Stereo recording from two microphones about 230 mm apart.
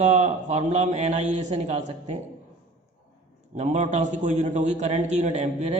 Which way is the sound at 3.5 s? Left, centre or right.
Right.